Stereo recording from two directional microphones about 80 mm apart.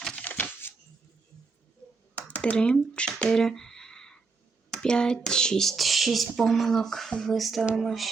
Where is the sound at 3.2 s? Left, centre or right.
Centre.